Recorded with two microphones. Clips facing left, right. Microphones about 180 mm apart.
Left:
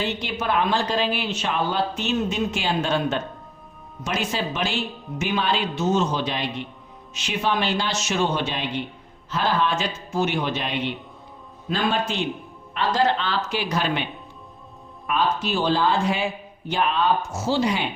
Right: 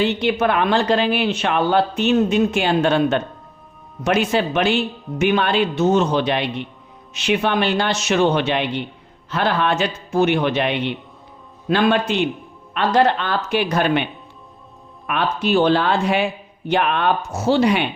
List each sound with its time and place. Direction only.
0.0 s a woman's voice: 65° right (ahead or behind)